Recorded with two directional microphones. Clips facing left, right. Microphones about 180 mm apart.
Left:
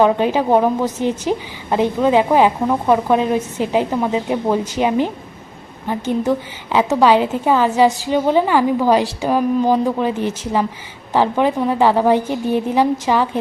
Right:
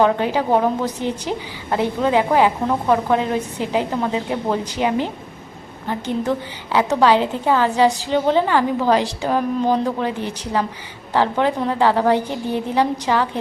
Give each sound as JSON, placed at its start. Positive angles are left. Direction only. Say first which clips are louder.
{"t": 0.0, "sound": "a woman's voice", "louder": "left 3 dB", "side_deg": 15}